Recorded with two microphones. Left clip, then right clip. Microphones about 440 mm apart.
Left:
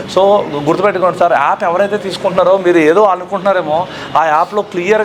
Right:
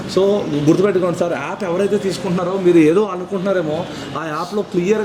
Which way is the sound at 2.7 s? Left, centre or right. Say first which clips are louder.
Left 5 dB; left.